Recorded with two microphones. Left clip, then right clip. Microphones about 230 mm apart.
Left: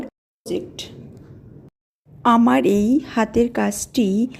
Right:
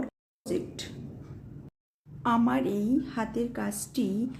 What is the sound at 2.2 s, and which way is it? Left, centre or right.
A woman's voice, left.